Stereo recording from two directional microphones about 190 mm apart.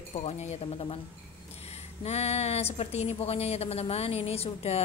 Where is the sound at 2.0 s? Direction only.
35° left (ahead or behind).